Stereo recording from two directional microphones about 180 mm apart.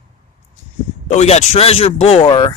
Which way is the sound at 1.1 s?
40° left (ahead or behind).